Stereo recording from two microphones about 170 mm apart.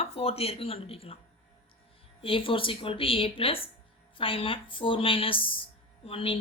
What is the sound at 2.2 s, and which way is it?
A woman's voice, 30° left (ahead or behind).